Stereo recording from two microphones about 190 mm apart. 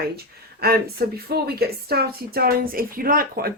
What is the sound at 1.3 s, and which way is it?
A woman's voice, 55° right (ahead or behind).